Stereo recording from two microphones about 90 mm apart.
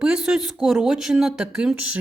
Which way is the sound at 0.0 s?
10° right (ahead or behind).